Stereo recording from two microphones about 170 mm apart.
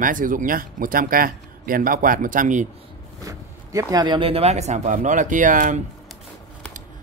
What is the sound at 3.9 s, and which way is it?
Speech, 25° right (ahead or behind).